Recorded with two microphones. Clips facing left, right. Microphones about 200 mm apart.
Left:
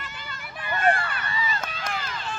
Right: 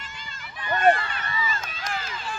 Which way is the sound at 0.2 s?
55° left (ahead or behind).